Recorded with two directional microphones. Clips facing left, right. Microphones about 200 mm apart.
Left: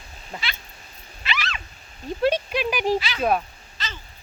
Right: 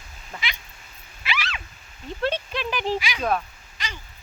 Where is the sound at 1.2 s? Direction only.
10° right (ahead or behind).